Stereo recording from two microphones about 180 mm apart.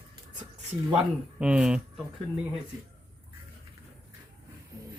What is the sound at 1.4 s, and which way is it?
Speech, 5° right (ahead or behind).